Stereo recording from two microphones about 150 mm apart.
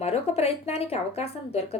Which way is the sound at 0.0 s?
45° left (ahead or behind).